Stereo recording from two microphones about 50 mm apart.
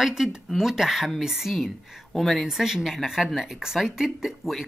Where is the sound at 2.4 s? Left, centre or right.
Centre.